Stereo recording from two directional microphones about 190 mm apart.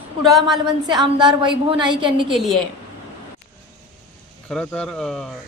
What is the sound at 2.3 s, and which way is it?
Speech, centre (ahead or behind).